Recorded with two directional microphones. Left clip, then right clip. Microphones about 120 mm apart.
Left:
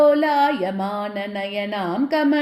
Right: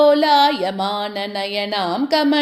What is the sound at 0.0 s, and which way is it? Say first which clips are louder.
Music: right 3 dB; 50° right (ahead or behind).